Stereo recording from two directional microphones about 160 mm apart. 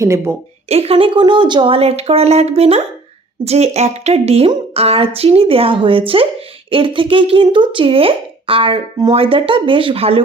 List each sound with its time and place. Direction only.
0.0 s a woman's voice: 20° right (ahead or behind)
0.7 s speech: 40° right (ahead or behind)